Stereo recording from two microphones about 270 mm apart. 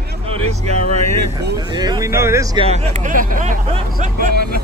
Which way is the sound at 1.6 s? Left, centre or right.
Centre.